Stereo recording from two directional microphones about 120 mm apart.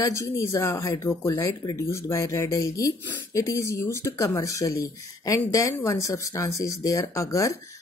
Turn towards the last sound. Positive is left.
turn(degrees=25)  # may be behind; listen again after turning